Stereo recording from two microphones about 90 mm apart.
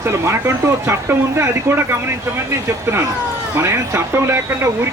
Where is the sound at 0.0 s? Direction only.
30° right (ahead or behind).